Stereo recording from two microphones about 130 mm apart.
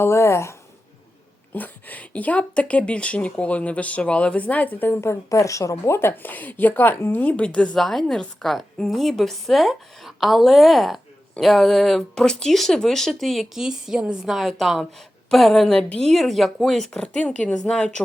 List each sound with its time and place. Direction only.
0.0 s a woman's voice: 20° left (ahead or behind)
1.5 s a woman's voice: 15° left (ahead or behind)